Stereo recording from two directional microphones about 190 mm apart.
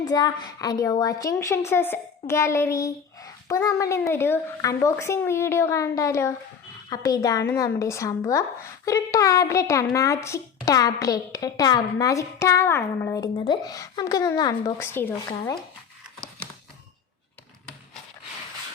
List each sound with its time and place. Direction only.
0.0 s speech: 20° left (ahead or behind)